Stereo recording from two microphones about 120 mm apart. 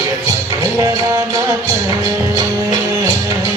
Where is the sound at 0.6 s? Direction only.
30° right (ahead or behind).